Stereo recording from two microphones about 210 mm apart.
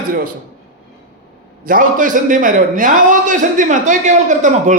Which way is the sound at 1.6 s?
40° right (ahead or behind).